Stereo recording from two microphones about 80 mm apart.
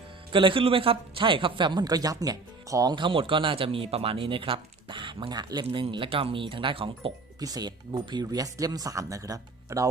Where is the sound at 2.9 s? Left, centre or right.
Right.